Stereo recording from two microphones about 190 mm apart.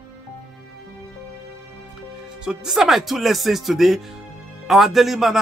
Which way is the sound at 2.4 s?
5° right (ahead or behind).